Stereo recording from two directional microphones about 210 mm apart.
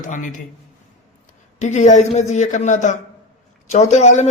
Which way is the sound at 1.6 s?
35° left (ahead or behind).